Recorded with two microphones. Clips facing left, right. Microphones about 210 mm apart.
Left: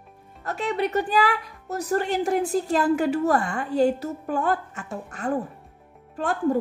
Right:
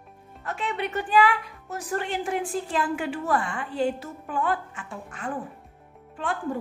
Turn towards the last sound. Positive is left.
turn(degrees=40)  # may be behind; listen again after turning